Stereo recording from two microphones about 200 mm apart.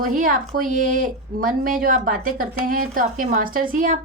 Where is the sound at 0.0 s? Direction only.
45° right (ahead or behind).